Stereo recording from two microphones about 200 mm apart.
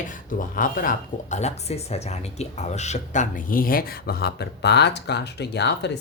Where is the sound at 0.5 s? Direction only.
45° left (ahead or behind).